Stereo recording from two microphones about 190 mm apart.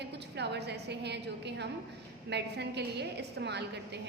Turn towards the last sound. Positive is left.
turn(degrees=-60)  # may be behind; listen again after turning